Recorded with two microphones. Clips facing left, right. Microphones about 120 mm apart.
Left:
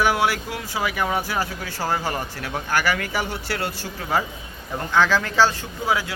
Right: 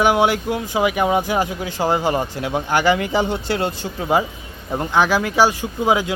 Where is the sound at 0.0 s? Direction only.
20° right (ahead or behind).